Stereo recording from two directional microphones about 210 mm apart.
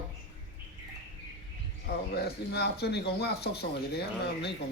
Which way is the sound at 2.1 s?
50° left (ahead or behind).